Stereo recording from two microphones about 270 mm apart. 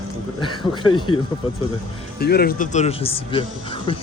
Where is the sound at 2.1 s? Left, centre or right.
Left; by 3.9 s centre.